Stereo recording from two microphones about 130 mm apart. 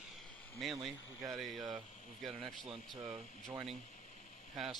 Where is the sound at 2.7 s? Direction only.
40° right (ahead or behind).